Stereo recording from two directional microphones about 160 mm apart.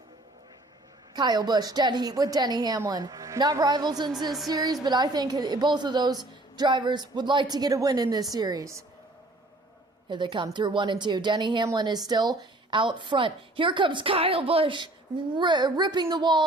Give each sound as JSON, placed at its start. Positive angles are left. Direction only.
{"t": 1.1, "sound": "a woman's voice", "side_deg": -25}
{"t": 10.1, "sound": "a woman's voice", "side_deg": -30}